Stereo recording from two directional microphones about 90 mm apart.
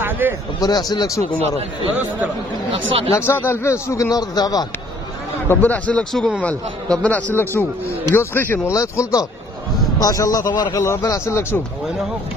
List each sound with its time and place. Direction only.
0.0 s a sound: 25° right (ahead or behind)
0.6 s speech: 45° left (ahead or behind)
2.7 s speech: 80° right
3.2 s speech: 25° left (ahead or behind)
4.2 s speech: 45° left (ahead or behind)
5.5 s speech: 20° left (ahead or behind)
6.1 s a man's voice: centre (ahead or behind)
6.9 s speech: 15° left (ahead or behind)
8.7 s speech: 40° left (ahead or behind)